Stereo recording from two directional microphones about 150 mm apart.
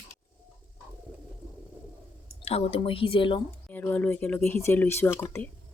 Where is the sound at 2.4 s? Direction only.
40° left (ahead or behind).